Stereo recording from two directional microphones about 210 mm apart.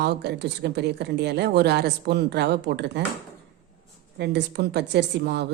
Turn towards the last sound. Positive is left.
turn(degrees=-55)  # may be behind; listen again after turning